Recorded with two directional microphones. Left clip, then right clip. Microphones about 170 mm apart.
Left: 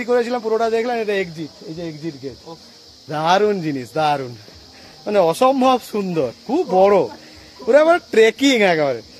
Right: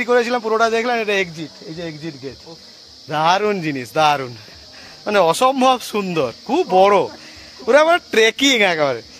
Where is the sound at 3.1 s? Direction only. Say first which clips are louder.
Even; 15° right (ahead or behind).